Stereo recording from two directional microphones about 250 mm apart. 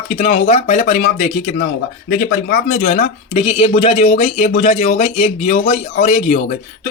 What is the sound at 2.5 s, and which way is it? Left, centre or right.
Speech, left.